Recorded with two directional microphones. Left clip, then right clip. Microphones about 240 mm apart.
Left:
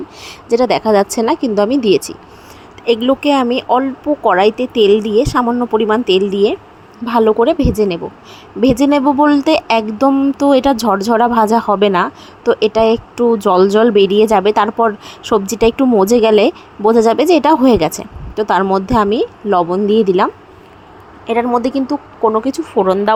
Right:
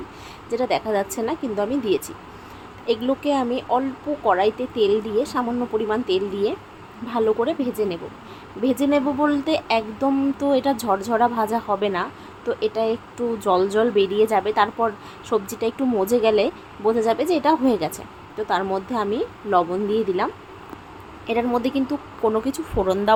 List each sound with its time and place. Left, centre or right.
0.3 s a woman's voice: left
21.2 s speech: centre